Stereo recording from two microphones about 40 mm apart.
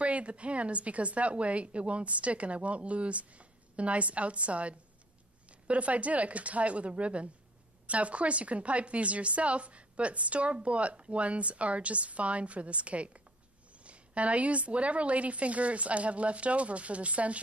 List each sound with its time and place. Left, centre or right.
0.0 s a woman's voice: right